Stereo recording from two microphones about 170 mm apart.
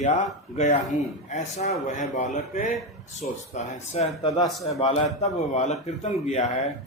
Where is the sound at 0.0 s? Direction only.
45° left (ahead or behind).